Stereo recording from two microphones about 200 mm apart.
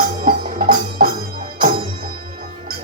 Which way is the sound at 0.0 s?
45° right (ahead or behind).